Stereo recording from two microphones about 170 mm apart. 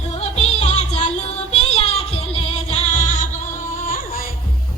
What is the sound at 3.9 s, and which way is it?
Music, 55° left (ahead or behind).